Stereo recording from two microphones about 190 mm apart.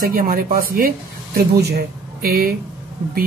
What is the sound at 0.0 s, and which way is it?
Speech, 50° right (ahead or behind).